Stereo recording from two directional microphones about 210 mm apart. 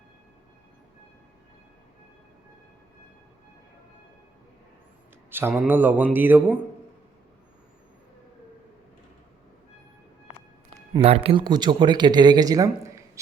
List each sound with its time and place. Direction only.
5.3 s speech: 10° right (ahead or behind)
10.9 s speech: 25° right (ahead or behind)